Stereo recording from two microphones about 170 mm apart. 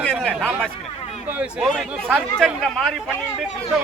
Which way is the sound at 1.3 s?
5° right (ahead or behind).